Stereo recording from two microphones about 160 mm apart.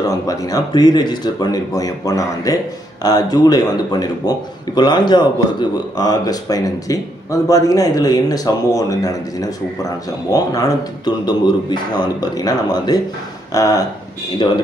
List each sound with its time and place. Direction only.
0.0 s speech: 20° left (ahead or behind)